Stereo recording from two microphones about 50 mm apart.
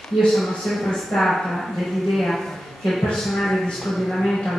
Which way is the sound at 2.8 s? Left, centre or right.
Centre.